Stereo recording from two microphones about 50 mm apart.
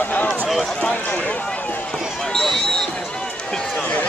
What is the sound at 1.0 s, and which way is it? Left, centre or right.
Speech, left.